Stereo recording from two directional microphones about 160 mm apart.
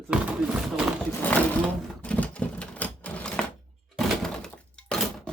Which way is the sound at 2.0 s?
10° left (ahead or behind).